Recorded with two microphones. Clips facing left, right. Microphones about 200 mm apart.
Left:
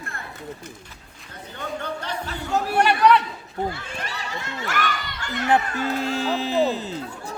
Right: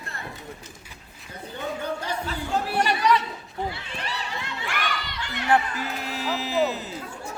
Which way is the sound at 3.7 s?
45° left (ahead or behind).